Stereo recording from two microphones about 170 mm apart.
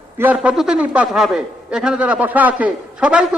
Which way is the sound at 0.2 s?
10° right (ahead or behind).